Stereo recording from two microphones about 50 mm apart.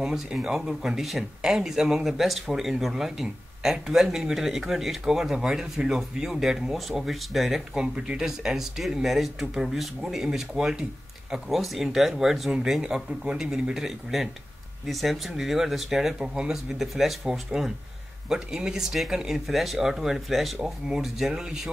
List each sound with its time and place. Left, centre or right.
0.0 s speech: centre
7.7 s speech: centre
11.4 s speech: centre
12.8 s speech: centre